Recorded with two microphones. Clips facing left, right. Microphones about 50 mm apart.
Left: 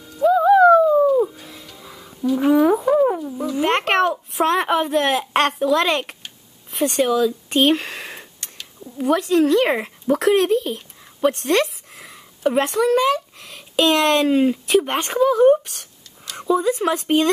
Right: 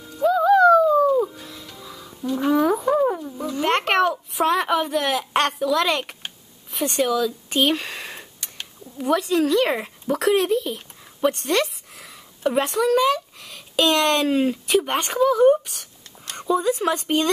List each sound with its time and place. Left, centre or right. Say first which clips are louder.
0.0 s music: left 3 dB; centre
0.3 s music: left 3 dB; centre
1.0 s music: left 2 dB; centre
1.8 s music: right 1 dB; centre
2.0 s a sound: left 4 dB; centre
4.6 s a child's voice: left 3 dB; centre
7.4 s a sound: left 4 dB; centre
8.9 s a child's voice: left 3 dB; centre